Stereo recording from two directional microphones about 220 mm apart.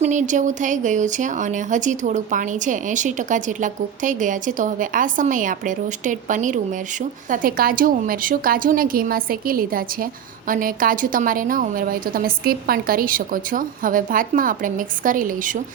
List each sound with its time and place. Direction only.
0.0 s a woman's voice: 35° right (ahead or behind)